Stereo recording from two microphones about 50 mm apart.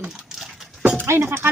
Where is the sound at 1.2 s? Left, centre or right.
Right.